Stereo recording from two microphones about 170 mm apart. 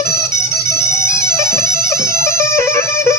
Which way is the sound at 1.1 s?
15° left (ahead or behind).